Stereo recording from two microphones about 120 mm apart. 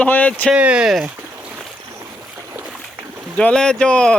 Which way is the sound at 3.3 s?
10° left (ahead or behind).